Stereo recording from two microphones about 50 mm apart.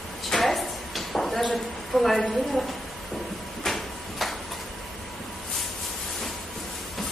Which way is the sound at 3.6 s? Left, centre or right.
Centre.